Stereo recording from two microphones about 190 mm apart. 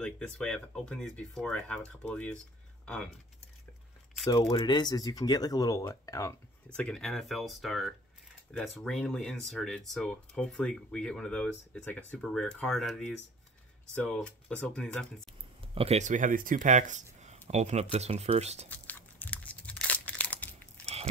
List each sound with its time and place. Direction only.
0.0 s speech: 5° left (ahead or behind)
4.3 s speech: 20° left (ahead or behind)
6.8 s speech: centre (ahead or behind)
15.7 s speech: 30° right (ahead or behind)
18.7 s crunch: 10° left (ahead or behind)
20.8 s biting: 35° right (ahead or behind)